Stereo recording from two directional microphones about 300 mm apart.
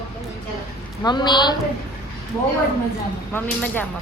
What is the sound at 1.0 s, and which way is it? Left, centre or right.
Speech, centre.